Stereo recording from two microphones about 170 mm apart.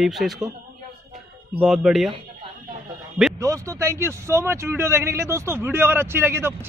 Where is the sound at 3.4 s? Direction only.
20° right (ahead or behind).